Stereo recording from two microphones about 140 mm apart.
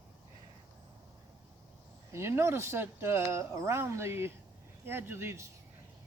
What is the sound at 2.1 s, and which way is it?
A man's voice, 20° right (ahead or behind).